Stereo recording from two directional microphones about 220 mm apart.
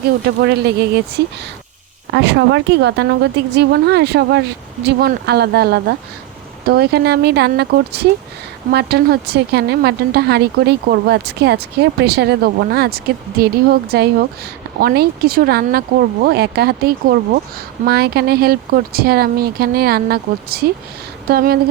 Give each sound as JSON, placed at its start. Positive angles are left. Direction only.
{"t": 0.3, "sound": "speech", "side_deg": -50}
{"t": 2.1, "sound": "speech", "side_deg": -55}